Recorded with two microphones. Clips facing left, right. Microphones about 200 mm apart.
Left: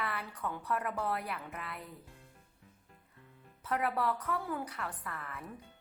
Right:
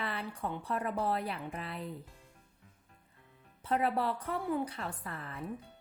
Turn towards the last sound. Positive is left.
turn(degrees=-30)  # may be behind; listen again after turning